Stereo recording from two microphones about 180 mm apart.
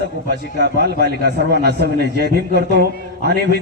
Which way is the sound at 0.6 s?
65° right (ahead or behind).